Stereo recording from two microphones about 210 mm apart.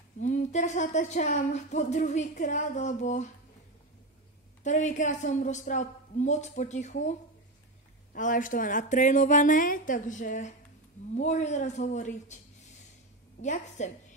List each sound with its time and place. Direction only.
0.2 s speech: 35° left (ahead or behind)
4.6 s speech: 35° left (ahead or behind)
8.1 s speech: 40° left (ahead or behind)
13.4 s speech: 35° left (ahead or behind)